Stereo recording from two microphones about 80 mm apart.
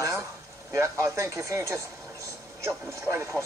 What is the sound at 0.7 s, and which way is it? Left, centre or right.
Speech, right.